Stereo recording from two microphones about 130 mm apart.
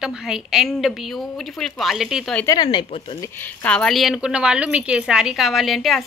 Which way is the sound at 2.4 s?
30° left (ahead or behind).